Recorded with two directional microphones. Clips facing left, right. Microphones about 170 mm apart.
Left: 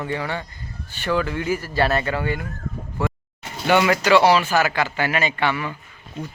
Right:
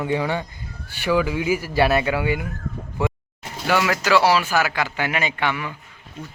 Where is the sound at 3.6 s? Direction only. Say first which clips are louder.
Left 3 dB; centre (ahead or behind).